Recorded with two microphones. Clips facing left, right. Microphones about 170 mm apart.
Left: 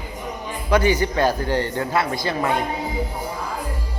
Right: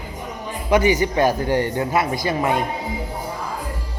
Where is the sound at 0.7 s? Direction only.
20° right (ahead or behind).